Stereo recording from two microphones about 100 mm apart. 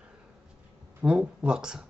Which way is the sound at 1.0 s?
10° right (ahead or behind).